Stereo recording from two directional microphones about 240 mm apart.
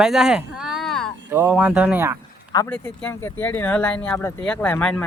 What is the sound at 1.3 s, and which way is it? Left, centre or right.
Speech, centre.